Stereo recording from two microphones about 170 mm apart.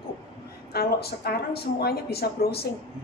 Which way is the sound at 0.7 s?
65° left (ahead or behind).